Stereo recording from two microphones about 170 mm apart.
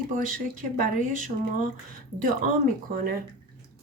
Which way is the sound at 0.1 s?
50° right (ahead or behind).